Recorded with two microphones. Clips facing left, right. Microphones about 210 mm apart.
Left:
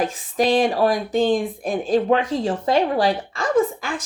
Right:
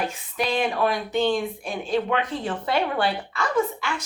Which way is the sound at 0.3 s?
35° left (ahead or behind).